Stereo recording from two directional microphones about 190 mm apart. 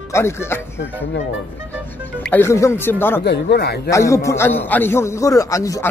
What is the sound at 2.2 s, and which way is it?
A man's voice, 10° left (ahead or behind).